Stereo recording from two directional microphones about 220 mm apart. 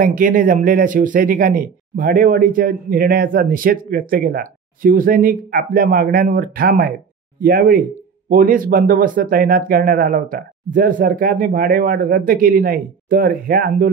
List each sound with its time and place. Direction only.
0.0 s a man's voice: 40° right (ahead or behind)